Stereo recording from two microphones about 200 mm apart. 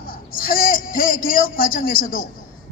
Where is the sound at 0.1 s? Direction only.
45° left (ahead or behind).